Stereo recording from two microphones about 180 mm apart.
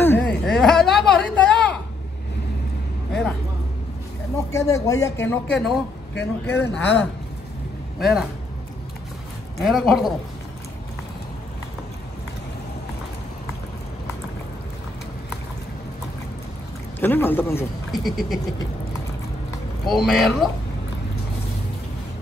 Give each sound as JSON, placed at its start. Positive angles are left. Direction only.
{"t": 0.0, "sound": "a sound", "side_deg": 10}
{"t": 3.1, "sound": "a sound", "side_deg": 5}
{"t": 4.5, "sound": "speech", "side_deg": 15}
{"t": 9.6, "sound": "speech", "side_deg": 0}
{"t": 17.0, "sound": "speech", "side_deg": 10}
{"t": 17.9, "sound": "speech", "side_deg": 0}
{"t": 19.9, "sound": "speech", "side_deg": 0}